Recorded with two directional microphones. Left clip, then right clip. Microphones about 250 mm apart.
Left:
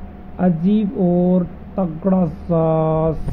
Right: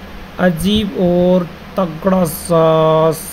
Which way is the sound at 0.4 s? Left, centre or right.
Centre.